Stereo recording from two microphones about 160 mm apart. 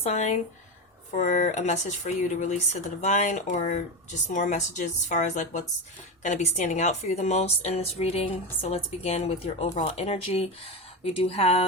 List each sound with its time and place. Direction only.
0.0 s speech: 45° left (ahead or behind)